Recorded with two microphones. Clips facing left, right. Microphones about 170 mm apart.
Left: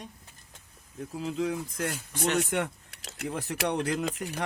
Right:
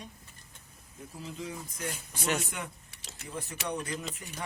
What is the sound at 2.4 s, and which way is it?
Speech, 75° left (ahead or behind).